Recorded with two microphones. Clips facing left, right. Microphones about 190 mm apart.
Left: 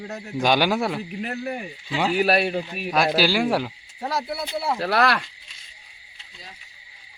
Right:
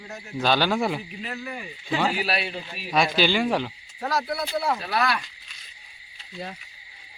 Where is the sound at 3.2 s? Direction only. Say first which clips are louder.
Left 2 dB; 5° left (ahead or behind).